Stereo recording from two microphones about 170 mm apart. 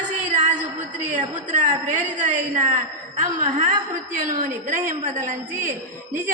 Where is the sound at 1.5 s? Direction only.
45° right (ahead or behind).